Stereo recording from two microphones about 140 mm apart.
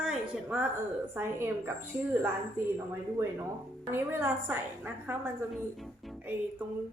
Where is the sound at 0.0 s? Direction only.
5° right (ahead or behind).